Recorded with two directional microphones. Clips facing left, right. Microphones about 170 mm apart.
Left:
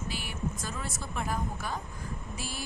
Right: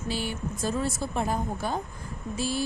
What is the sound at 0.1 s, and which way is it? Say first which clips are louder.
A woman's voice: right 7 dB; 30° right (ahead or behind).